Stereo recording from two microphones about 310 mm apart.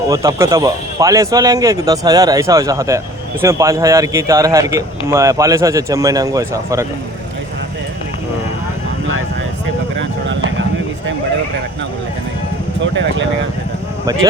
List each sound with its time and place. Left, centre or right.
0.1 s a man's voice: centre
12.8 s speech: right